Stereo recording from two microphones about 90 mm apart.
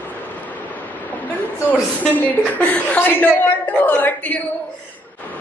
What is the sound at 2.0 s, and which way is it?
A woman's voice, 15° left (ahead or behind).